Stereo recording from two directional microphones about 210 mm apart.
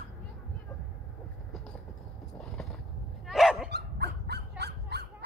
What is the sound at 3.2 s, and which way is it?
Dog, centre (ahead or behind).